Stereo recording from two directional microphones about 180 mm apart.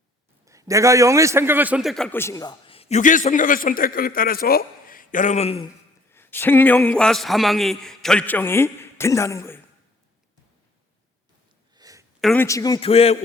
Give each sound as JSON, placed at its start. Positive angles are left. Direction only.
{"t": 0.4, "sound": "a man's voice", "side_deg": -15}
{"t": 6.1, "sound": "a man's voice", "side_deg": 10}
{"t": 11.8, "sound": "a sound", "side_deg": -20}
{"t": 12.2, "sound": "a man's voice", "side_deg": 5}
{"t": 12.5, "sound": "a man's voice", "side_deg": 20}
{"t": 12.9, "sound": "a man's voice", "side_deg": 35}